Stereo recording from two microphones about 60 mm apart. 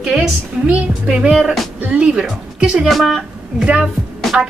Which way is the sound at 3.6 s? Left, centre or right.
Centre.